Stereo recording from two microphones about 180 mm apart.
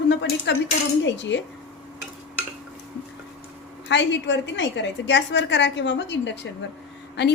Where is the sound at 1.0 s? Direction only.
90° left.